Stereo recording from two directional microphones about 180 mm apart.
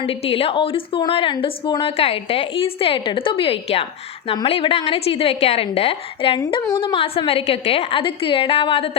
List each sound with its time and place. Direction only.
0.1 s a woman's voice: 30° left (ahead or behind)